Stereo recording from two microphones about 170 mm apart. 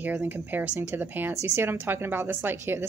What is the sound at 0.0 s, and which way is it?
Speech, 10° right (ahead or behind).